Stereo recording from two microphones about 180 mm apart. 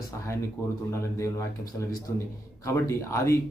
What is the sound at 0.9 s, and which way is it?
Speech, 15° left (ahead or behind).